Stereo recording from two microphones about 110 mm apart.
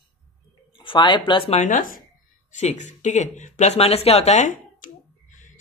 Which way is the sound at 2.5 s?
90° left.